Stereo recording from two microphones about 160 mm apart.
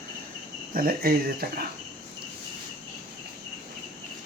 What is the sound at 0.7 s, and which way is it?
Speech, 65° right (ahead or behind).